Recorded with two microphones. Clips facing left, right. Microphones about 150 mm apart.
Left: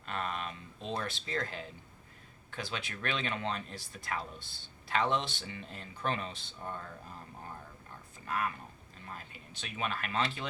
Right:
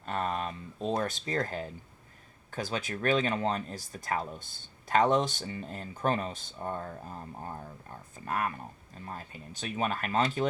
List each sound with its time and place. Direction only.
0.0 s a sound: 40° right (ahead or behind)
1.5 s speech: 45° right (ahead or behind)
8.2 s speech: 45° right (ahead or behind)